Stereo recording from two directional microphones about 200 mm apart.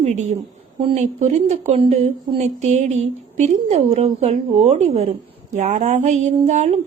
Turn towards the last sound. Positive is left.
turn(degrees=-35)  # may be behind; listen again after turning